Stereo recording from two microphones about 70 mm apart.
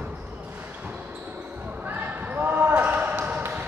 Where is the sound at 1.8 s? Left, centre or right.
Right.